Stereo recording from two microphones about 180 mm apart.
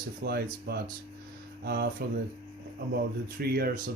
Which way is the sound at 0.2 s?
60° right (ahead or behind).